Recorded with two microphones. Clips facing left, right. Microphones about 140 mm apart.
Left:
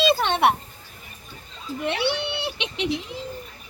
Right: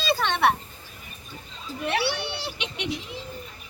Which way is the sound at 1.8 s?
20° left (ahead or behind).